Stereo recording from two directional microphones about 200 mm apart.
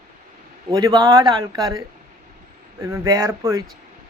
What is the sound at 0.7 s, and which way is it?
Speech, 20° right (ahead or behind).